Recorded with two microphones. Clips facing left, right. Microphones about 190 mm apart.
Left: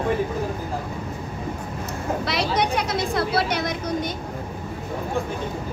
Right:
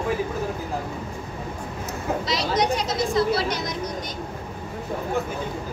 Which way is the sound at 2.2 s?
60° left (ahead or behind).